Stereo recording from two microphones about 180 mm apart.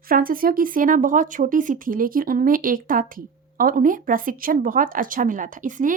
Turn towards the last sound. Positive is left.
turn(degrees=-45)  # may be behind; listen again after turning